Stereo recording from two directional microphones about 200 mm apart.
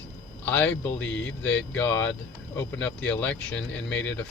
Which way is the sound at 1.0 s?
65° left (ahead or behind).